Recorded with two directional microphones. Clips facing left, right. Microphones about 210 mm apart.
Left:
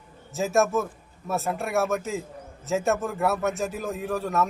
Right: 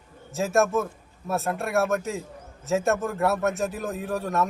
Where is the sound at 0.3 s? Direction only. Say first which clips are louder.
Even; centre (ahead or behind).